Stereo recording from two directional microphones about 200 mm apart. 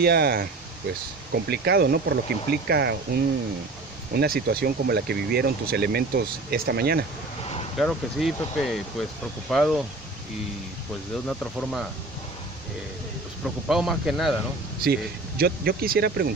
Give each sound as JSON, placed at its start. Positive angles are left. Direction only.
{"t": 0.0, "sound": "speech", "side_deg": -50}
{"t": 7.8, "sound": "speech", "side_deg": 0}
{"t": 11.2, "sound": "speech", "side_deg": 5}
{"t": 13.7, "sound": "speech", "side_deg": 0}
{"t": 14.8, "sound": "speech", "side_deg": -50}